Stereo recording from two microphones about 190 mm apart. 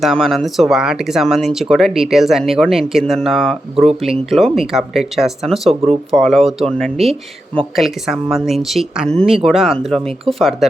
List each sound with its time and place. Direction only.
0.0 s speech: centre (ahead or behind)
7.1 s speech: 25° right (ahead or behind)
7.8 s speech: centre (ahead or behind)